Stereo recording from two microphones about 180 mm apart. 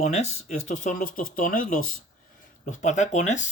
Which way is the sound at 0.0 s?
40° left (ahead or behind).